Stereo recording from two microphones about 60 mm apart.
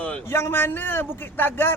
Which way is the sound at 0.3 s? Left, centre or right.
Left.